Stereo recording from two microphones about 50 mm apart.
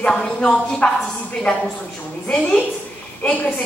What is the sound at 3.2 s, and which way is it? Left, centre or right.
Speech, left.